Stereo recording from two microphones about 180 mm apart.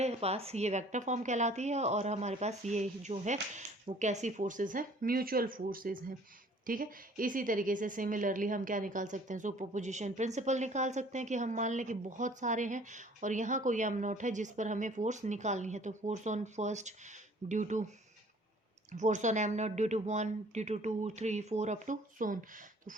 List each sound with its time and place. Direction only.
0.0 s a woman's voice: 35° right (ahead or behind)